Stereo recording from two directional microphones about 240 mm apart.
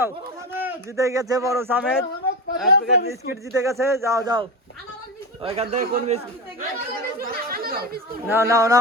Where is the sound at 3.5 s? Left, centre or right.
Centre; by 8.0 s right.